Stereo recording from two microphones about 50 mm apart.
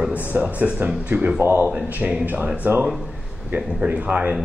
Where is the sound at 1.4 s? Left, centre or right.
Right.